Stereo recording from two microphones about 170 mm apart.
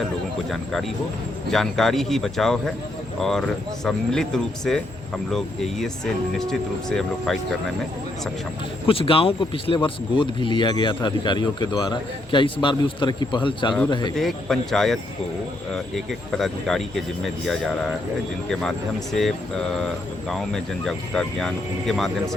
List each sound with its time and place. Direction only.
0.5 s speech: centre (ahead or behind)
6.4 s speech: 5° left (ahead or behind)
8.9 s speech: 35° left (ahead or behind)
14.2 s speech: centre (ahead or behind)
16.4 s speech: centre (ahead or behind)
18.4 s speech: centre (ahead or behind)
20.2 s speech: 5° left (ahead or behind)